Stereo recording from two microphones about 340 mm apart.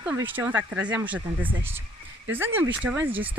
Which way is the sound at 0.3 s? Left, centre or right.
Centre.